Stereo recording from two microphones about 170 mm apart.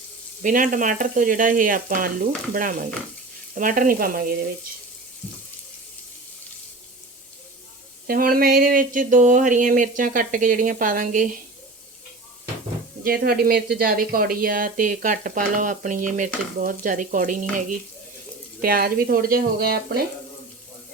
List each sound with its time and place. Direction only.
0.4 s speech: 50° right (ahead or behind)
8.0 s speech: 60° right (ahead or behind)
13.1 s speech: 60° right (ahead or behind)
18.6 s speech: 60° right (ahead or behind)